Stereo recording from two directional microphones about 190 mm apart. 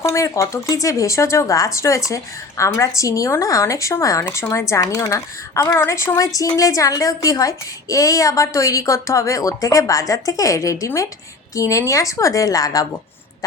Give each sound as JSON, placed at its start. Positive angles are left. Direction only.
{"t": 0.0, "sound": "speech", "side_deg": 15}